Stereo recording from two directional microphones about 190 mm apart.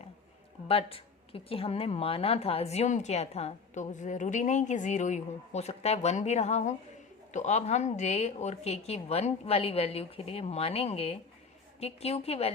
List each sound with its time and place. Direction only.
0.7 s a woman's voice: 30° left (ahead or behind)